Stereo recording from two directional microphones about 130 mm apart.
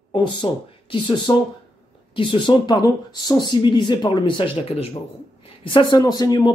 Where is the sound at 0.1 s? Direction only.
35° left (ahead or behind).